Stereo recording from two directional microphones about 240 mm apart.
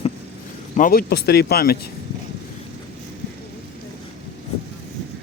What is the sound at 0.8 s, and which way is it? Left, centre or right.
Speech, left.